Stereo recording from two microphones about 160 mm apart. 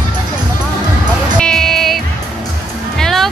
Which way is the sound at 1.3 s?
5° left (ahead or behind).